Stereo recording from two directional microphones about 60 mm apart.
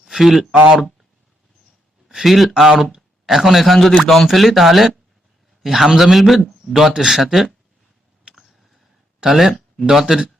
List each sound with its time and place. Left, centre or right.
0.0 s a sound: centre
0.5 s speech: right
2.0 s speech: centre
9.2 s a man's voice: centre